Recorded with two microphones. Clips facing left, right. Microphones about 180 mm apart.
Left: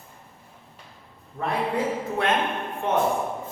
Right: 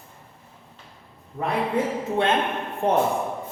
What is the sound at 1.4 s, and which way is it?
Speech, 25° right (ahead or behind).